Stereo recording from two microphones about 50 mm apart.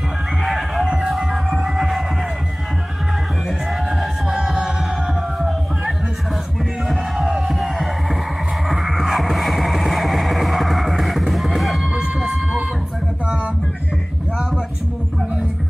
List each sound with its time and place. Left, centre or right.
0.4 s music: centre
4.3 s music: centre
6.9 s music: centre
11.9 s music: right